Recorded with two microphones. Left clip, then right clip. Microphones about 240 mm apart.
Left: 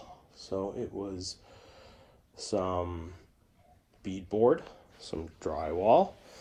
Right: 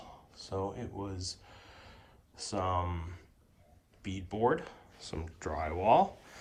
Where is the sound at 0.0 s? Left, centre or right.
Left.